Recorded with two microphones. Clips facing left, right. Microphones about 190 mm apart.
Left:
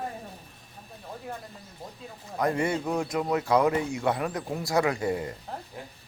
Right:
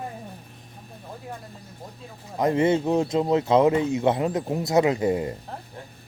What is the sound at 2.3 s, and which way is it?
Speech, 20° right (ahead or behind).